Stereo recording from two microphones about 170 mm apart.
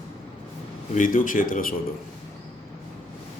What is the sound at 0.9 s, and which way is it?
Speech, 50° left (ahead or behind).